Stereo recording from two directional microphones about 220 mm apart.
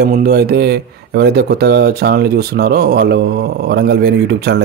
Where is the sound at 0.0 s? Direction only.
45° right (ahead or behind).